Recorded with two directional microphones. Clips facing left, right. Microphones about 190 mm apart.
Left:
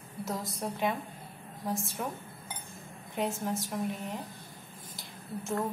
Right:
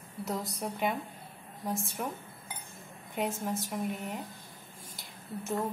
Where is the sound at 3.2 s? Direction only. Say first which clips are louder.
Left 1 dB; centre (ahead or behind).